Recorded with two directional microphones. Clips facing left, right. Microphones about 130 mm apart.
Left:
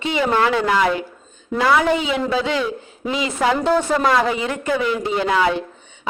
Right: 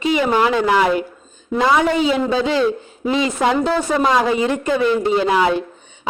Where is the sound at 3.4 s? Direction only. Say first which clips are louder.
Left 3 dB; 15° right (ahead or behind).